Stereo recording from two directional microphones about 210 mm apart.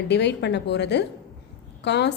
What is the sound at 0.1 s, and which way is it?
A woman's voice, 55° left (ahead or behind).